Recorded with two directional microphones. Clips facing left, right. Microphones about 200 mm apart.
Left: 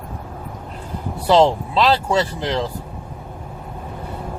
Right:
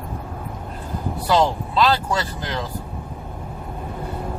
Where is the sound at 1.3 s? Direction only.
25° left (ahead or behind).